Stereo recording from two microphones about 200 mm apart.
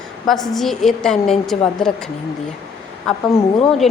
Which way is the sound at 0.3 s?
Centre (ahead or behind).